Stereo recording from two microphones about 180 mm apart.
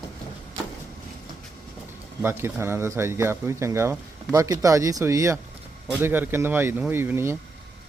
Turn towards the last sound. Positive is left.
turn(degrees=-15)  # may be behind; listen again after turning